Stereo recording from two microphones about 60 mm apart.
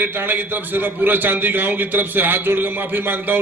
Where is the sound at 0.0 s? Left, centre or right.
Right.